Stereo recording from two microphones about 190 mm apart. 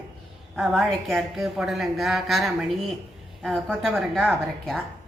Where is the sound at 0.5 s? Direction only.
Centre (ahead or behind).